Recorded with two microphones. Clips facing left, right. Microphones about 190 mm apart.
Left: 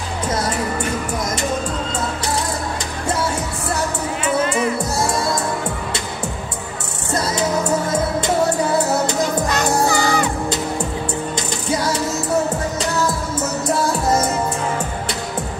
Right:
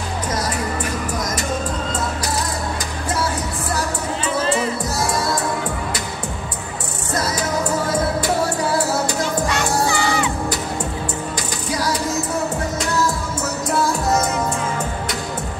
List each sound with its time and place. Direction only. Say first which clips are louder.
4.2 s music: left 2 dB; 30° right (ahead or behind)
9.5 s music: left 2 dB; 40° left (ahead or behind)